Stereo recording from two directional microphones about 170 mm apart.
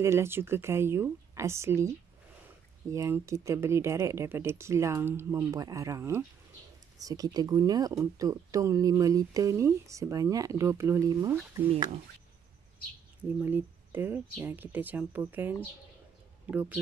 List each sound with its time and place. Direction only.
0.0 s speech: 15° right (ahead or behind)
11.7 s speech: 35° right (ahead or behind)
13.4 s speech: 10° right (ahead or behind)